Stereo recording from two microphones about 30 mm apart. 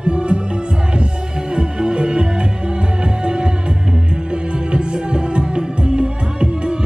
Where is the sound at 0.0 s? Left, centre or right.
Right.